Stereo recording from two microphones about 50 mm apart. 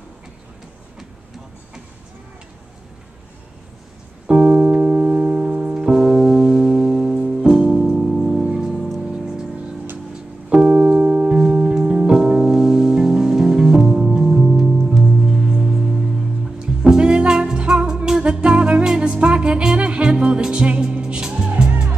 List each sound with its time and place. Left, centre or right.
4.3 s piano: right
8.5 s music: centre
10.5 s keyboard: right
15.2 s music: centre
16.5 s music: centre